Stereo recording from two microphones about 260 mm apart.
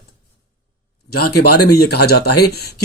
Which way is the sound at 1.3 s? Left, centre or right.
Left.